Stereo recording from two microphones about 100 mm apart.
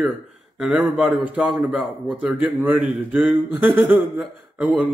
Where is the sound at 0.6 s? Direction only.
5° right (ahead or behind).